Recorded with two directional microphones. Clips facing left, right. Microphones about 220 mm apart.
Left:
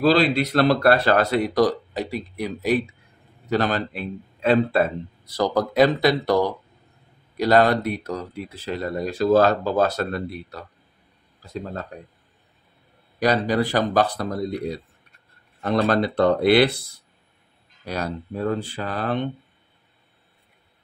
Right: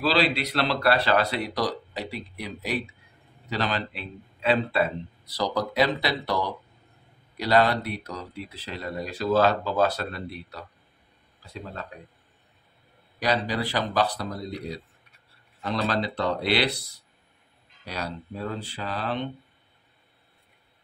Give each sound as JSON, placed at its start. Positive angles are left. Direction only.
{"t": 0.0, "sound": "speech", "side_deg": 45}
{"t": 13.2, "sound": "speech", "side_deg": 45}
{"t": 17.8, "sound": "speech", "side_deg": 45}